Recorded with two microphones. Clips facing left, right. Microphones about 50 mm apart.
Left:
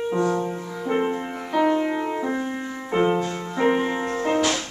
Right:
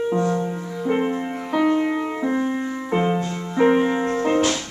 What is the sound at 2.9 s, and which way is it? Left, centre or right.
Music, centre.